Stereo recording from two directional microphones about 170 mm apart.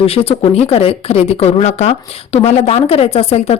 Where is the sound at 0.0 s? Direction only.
35° left (ahead or behind).